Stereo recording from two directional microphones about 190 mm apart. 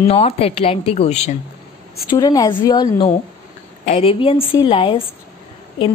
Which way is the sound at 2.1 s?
20° left (ahead or behind).